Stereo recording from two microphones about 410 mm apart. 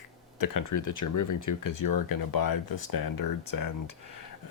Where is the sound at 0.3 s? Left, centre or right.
Left.